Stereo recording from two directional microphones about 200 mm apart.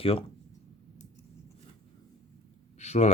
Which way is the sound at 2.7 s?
35° left (ahead or behind).